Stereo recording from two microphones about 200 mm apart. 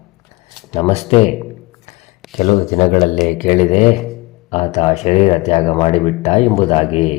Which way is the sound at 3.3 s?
40° left (ahead or behind).